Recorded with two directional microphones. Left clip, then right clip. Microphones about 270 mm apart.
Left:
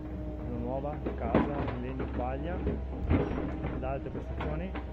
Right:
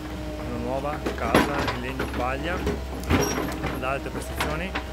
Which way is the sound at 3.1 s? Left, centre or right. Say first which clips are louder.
Right 8 dB; right.